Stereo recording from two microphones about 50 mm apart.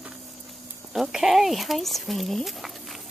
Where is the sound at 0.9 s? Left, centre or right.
Centre.